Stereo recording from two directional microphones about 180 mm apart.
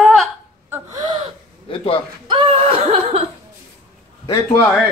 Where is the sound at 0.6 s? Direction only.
15° right (ahead or behind).